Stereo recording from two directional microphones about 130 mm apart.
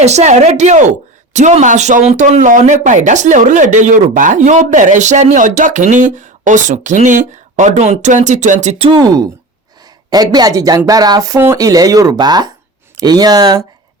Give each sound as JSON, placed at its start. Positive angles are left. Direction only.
{"t": 0.0, "sound": "speech", "side_deg": -60}
{"t": 8.9, "sound": "speech", "side_deg": -30}